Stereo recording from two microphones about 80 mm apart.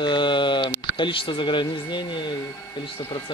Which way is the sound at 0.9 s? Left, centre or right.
Left.